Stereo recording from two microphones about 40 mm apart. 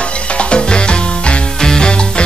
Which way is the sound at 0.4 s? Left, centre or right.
Left.